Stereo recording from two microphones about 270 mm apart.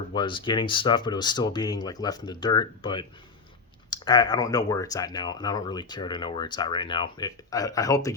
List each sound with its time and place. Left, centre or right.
0.1 s speech: centre